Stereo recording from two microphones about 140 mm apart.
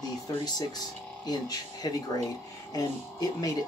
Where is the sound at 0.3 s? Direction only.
25° left (ahead or behind).